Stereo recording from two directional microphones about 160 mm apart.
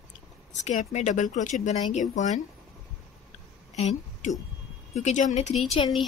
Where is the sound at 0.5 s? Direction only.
45° left (ahead or behind).